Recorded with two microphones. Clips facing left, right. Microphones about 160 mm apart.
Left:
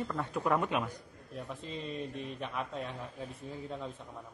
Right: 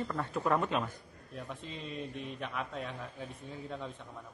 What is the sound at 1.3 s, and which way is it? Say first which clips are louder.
A man's voice: left 2 dB; centre (ahead or behind).